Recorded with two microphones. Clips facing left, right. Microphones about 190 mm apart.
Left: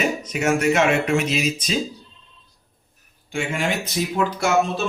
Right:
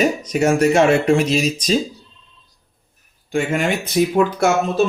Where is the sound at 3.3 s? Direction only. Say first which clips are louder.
Right 5 dB; 40° right (ahead or behind).